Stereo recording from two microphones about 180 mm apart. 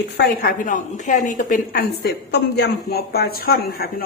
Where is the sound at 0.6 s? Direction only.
45° left (ahead or behind).